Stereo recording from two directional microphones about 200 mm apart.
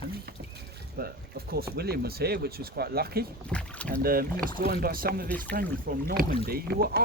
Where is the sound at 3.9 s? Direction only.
45° right (ahead or behind).